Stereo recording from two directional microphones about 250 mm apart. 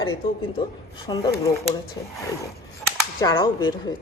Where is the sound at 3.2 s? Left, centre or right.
Centre.